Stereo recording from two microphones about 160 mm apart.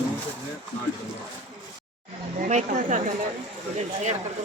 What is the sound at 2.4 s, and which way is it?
Speech, 50° right (ahead or behind).